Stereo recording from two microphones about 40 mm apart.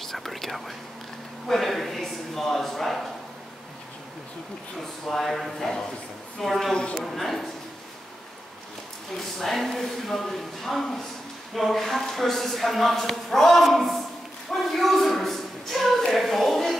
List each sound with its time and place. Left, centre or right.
0.1 s whispering: centre
1.5 s speech: centre
5.0 s speech: centre
6.7 s a man's voice: left
7.1 s speech: centre
9.1 s speech: centre
14.5 s a sound: centre